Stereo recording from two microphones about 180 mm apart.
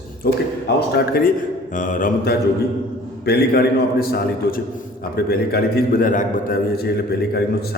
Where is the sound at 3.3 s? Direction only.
65° left (ahead or behind).